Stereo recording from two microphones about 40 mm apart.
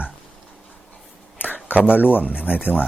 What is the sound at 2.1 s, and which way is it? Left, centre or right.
Speech, right.